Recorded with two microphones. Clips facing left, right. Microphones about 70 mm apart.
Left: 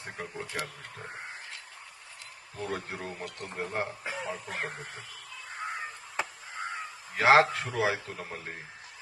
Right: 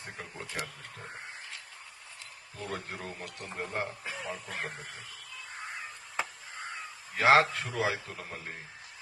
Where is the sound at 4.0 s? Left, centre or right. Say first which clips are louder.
Left 3 dB; centre.